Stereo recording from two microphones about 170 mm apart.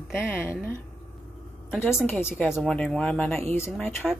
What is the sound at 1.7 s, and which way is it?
A woman's voice, 10° left (ahead or behind).